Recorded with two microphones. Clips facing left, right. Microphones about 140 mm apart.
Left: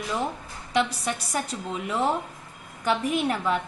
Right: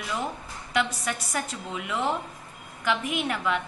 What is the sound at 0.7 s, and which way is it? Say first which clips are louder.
A woman's voice: left 2 dB; 35° left (ahead or behind).